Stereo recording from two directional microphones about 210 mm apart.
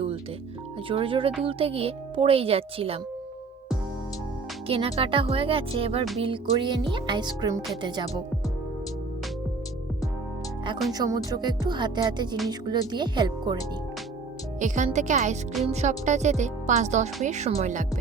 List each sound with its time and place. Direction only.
0.9 s a child's voice: 25° right (ahead or behind)
4.7 s a child's voice: 25° right (ahead or behind)
10.9 s a child's voice: 15° right (ahead or behind)
14.6 s speech: 35° right (ahead or behind)